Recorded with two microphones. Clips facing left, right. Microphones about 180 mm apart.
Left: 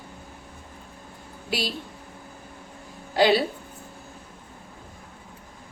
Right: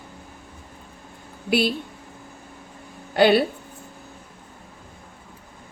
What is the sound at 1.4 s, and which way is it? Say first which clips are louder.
Speech: right 8 dB; 60° right (ahead or behind).